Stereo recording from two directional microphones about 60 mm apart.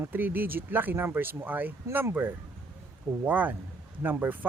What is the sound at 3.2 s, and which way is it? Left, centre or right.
Speech, right.